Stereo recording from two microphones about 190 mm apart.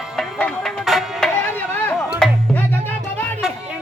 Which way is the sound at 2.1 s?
Centre (ahead or behind).